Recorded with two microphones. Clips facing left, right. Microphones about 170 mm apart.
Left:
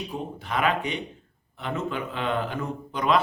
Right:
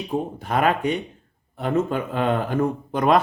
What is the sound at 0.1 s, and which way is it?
Speech, 45° right (ahead or behind).